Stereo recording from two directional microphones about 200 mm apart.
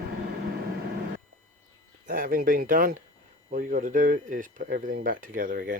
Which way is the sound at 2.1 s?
45° right (ahead or behind).